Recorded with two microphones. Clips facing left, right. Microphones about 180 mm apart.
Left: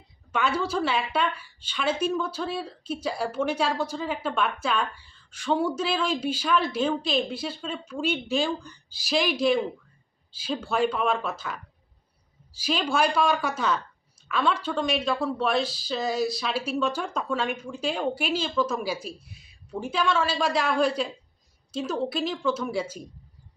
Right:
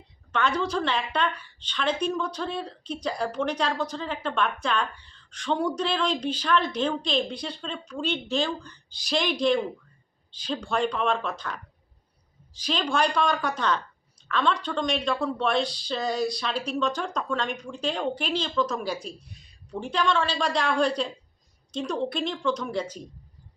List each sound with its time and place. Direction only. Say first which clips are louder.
0.3 s a woman's voice: even; 10° left (ahead or behind)